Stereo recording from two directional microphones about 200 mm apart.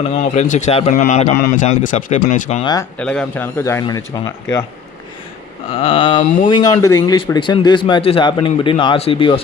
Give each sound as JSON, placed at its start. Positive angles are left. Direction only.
{"t": 0.0, "sound": "a man's voice", "side_deg": 30}
{"t": 3.0, "sound": "speech", "side_deg": 5}
{"t": 5.7, "sound": "speech", "side_deg": 25}